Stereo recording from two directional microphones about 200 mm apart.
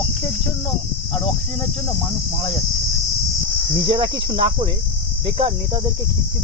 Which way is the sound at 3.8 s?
25° right (ahead or behind).